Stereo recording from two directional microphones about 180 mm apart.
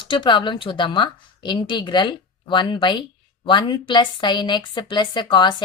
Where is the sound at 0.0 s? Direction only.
25° left (ahead or behind).